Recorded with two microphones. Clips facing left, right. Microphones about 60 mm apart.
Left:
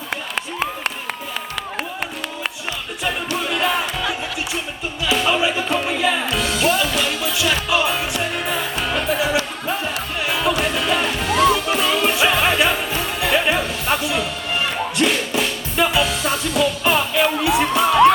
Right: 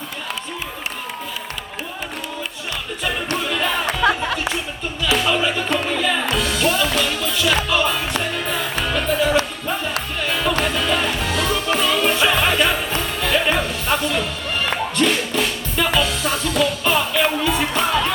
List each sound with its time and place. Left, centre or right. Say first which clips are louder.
3.3 s music: left 2 dB; centre
4.0 s music: right 6 dB; right
5.1 s music: left 1 dB; centre